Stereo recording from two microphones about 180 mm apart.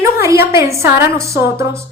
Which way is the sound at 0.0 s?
15° right (ahead or behind).